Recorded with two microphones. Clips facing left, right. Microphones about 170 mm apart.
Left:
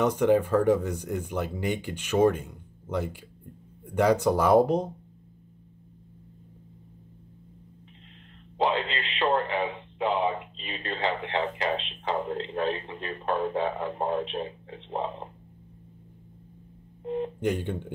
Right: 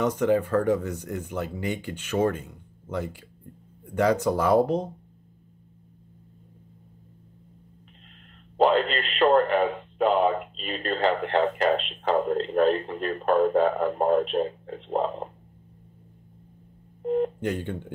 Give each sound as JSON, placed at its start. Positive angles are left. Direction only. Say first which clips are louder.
{"t": 0.2, "sound": "speech", "louder": "left 1 dB", "side_deg": 10}
{"t": 3.9, "sound": "speech", "louder": "even", "side_deg": 10}
{"t": 8.6, "sound": "speech", "louder": "right 6 dB", "side_deg": -45}
{"t": 17.0, "sound": "speech", "louder": "right 6 dB", "side_deg": -50}